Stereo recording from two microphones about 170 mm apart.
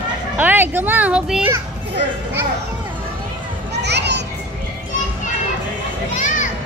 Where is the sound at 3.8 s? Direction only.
85° right.